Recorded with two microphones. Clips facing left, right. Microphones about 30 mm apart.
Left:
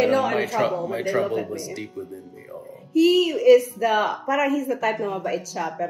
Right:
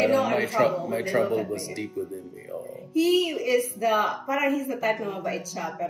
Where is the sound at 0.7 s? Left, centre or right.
Centre.